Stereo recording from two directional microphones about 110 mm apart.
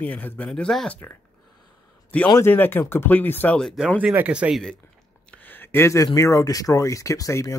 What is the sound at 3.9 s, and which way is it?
Speech, 15° right (ahead or behind).